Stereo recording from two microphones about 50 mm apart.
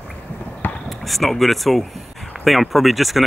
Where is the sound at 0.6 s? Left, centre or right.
Left.